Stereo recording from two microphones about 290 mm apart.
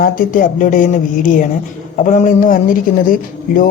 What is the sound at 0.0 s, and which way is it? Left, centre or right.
Speech, left.